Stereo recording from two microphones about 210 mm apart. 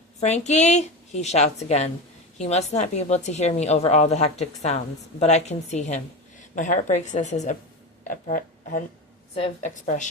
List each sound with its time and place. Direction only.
0.2 s a woman's voice: 30° left (ahead or behind)